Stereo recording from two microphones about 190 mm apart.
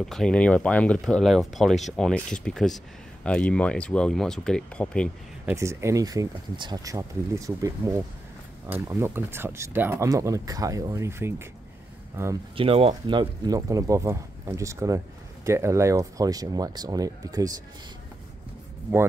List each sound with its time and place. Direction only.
0.0 s speech: centre (ahead or behind)
5.4 s speech: 10° right (ahead or behind)
12.5 s speech: 30° right (ahead or behind)